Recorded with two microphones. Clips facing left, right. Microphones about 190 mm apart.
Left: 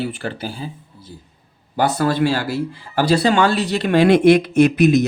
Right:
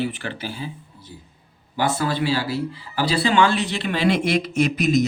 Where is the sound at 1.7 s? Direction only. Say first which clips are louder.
Left 5 dB; 45° left (ahead or behind).